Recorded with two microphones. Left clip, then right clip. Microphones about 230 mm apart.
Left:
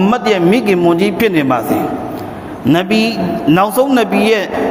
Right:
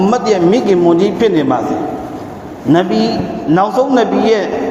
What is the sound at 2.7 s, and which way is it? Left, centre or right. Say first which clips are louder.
A man's voice: right 2 dB; left.